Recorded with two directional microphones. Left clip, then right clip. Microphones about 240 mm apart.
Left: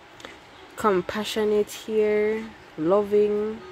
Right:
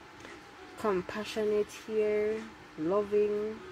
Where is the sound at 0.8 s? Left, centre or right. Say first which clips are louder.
Left 9 dB; left.